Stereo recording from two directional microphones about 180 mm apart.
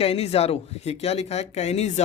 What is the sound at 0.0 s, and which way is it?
Speech, 35° left (ahead or behind).